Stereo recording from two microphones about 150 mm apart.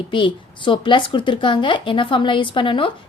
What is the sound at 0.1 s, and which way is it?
A woman's voice, 35° left (ahead or behind).